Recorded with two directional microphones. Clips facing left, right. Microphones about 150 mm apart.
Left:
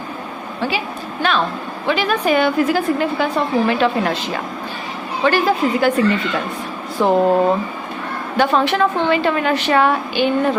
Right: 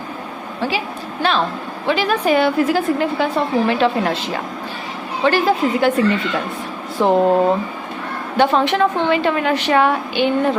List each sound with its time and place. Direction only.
1.2 s a woman's voice: 30° right (ahead or behind)
8.4 s a woman's voice: 25° right (ahead or behind)